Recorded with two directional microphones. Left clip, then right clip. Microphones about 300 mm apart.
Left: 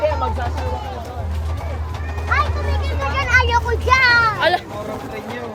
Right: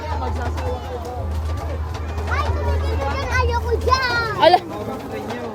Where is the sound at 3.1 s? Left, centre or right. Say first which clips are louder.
Left 9 dB; left.